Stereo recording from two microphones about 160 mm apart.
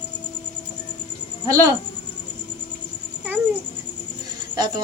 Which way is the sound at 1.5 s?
20° right (ahead or behind).